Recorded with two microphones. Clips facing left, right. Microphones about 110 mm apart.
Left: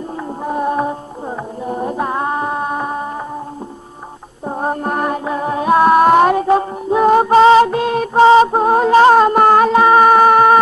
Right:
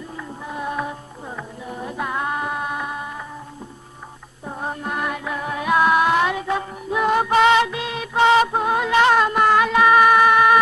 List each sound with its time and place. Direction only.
0.4 s music: 45° left (ahead or behind)
4.5 s music: 45° left (ahead or behind)